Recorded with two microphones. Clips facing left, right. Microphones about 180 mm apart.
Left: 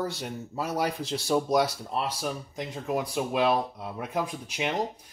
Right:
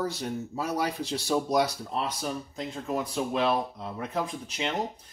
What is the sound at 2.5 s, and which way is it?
Speech, 15° left (ahead or behind).